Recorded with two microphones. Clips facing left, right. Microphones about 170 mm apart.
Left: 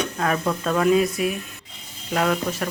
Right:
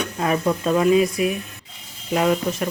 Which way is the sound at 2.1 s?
10° right (ahead or behind).